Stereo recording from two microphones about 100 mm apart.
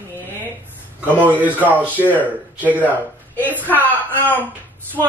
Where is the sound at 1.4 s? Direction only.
15° right (ahead or behind).